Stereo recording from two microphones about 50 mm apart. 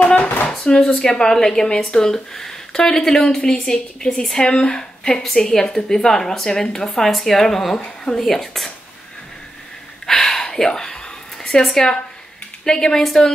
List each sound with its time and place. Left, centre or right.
0.0 s a sound: left
0.5 s speech: centre
8.2 s speech: centre
10.0 s gasp: centre
10.4 s speech: centre